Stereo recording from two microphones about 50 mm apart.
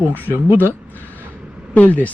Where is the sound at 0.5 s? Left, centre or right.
Left.